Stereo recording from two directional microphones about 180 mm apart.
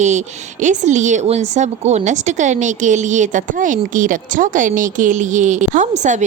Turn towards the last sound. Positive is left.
turn(degrees=-40)  # may be behind; listen again after turning